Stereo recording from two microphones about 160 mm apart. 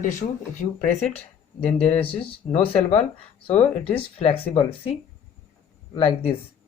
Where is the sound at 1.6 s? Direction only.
35° left (ahead or behind).